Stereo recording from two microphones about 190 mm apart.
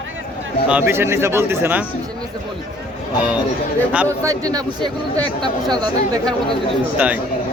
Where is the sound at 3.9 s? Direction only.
15° right (ahead or behind).